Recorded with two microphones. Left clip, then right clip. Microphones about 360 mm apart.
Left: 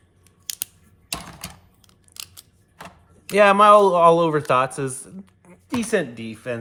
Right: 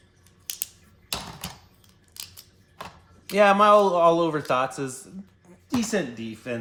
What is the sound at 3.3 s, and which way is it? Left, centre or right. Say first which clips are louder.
Speech: left 4 dB; left.